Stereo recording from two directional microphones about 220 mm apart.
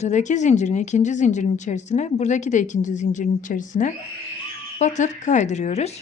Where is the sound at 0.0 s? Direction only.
35° left (ahead or behind).